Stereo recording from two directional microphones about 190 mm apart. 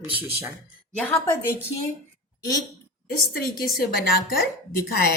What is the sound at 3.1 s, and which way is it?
A woman's voice, 50° left (ahead or behind).